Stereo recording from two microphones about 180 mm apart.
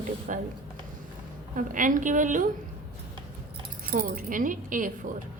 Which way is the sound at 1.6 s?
45° right (ahead or behind).